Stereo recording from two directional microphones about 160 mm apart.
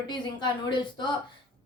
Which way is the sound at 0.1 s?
30° left (ahead or behind).